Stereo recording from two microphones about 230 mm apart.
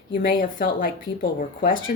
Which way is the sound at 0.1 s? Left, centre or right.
Left.